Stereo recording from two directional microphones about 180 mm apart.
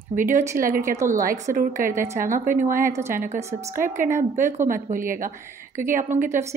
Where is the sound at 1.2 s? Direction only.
50° right (ahead or behind).